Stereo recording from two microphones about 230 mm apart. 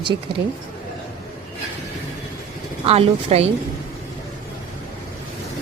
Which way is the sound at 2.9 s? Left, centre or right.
Right.